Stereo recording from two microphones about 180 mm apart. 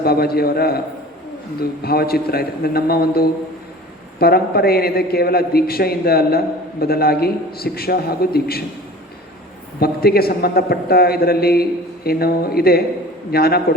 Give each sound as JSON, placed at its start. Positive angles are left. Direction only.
{"t": 0.0, "sound": "a man's voice", "side_deg": 60}
{"t": 1.8, "sound": "a man's voice", "side_deg": 60}
{"t": 9.8, "sound": "a man's voice", "side_deg": 60}